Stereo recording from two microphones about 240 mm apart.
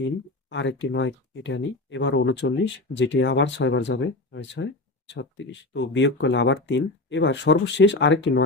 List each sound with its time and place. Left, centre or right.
0.5 s speech: left